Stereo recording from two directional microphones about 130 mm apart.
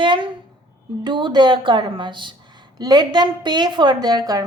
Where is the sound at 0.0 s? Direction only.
40° right (ahead or behind).